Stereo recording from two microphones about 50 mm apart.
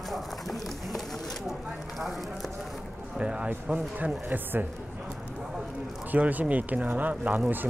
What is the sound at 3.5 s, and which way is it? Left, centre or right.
Speech, right.